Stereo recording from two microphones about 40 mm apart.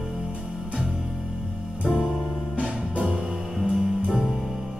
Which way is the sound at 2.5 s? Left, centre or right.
Right.